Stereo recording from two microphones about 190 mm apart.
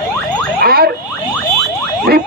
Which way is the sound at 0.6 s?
50° right (ahead or behind).